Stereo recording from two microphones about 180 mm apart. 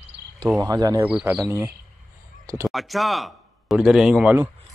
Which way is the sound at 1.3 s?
15° right (ahead or behind).